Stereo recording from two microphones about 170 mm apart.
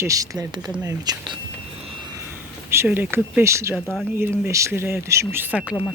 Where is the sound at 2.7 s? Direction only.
15° right (ahead or behind).